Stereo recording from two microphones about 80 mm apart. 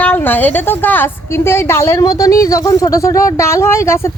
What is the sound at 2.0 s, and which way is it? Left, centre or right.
Speech, left.